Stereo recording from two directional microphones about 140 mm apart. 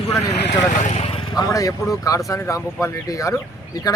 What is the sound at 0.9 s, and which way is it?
Vehicle, 45° left (ahead or behind).